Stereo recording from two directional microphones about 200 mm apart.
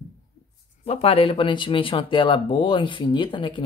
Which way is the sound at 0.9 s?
30° left (ahead or behind).